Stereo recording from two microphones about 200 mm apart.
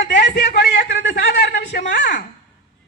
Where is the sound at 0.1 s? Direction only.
60° left (ahead or behind).